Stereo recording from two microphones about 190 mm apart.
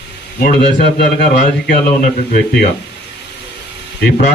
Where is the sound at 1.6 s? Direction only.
50° left (ahead or behind).